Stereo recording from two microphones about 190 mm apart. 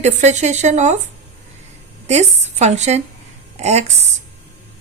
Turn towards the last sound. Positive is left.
turn(degrees=-35)  # may be behind; listen again after turning